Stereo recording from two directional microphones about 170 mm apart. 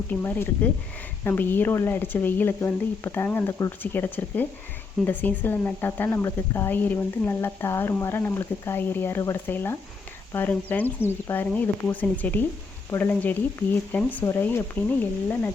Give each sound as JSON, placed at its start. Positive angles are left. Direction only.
{"t": 0.1, "sound": "a woman's voice", "side_deg": 10}